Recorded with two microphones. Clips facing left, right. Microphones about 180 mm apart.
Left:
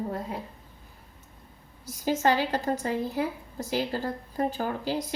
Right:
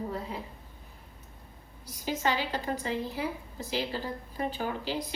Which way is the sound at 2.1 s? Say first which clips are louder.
Left 6 dB; 45° left (ahead or behind).